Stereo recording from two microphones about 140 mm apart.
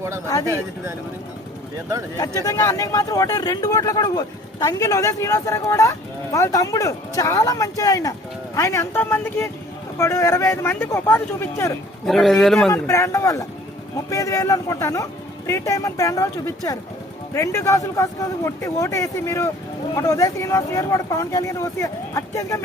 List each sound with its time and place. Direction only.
0.4 s speech: 20° right (ahead or behind)
2.1 s a man's voice: 25° left (ahead or behind)
12.0 s speech: centre (ahead or behind)
12.7 s speech: 20° left (ahead or behind)